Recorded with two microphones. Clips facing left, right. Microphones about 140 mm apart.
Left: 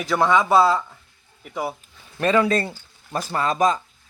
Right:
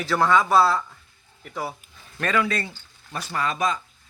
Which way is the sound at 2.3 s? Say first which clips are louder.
Left 5 dB; 35° left (ahead or behind).